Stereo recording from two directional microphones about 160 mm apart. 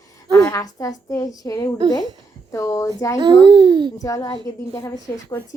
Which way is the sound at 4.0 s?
20° left (ahead or behind).